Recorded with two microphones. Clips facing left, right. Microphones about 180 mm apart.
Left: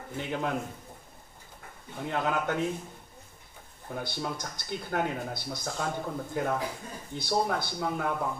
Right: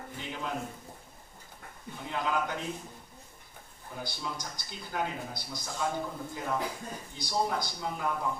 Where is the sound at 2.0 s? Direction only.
60° left (ahead or behind).